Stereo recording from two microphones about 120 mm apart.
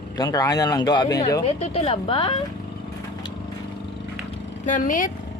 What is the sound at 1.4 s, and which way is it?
Speech, 55° left (ahead or behind).